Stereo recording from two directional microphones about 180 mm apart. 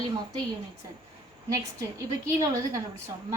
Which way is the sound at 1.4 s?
15° right (ahead or behind).